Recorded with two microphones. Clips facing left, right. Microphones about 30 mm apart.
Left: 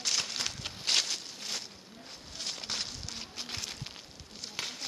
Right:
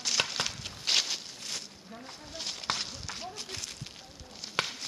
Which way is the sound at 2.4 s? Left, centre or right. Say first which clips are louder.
Right 3 dB; centre.